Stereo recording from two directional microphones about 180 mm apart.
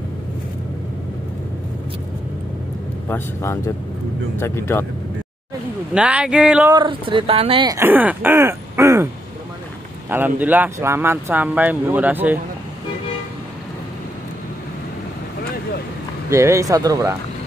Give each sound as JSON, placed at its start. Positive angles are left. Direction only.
{"t": 3.1, "sound": "speech", "side_deg": 15}
{"t": 5.9, "sound": "speech", "side_deg": -5}
{"t": 6.7, "sound": "speech", "side_deg": -25}
{"t": 7.7, "sound": "speech", "side_deg": -10}
{"t": 16.3, "sound": "speech", "side_deg": -15}